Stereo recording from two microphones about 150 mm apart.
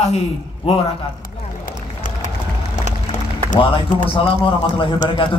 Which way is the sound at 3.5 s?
35° left (ahead or behind).